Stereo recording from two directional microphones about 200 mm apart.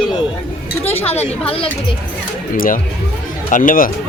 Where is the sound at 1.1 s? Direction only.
30° left (ahead or behind).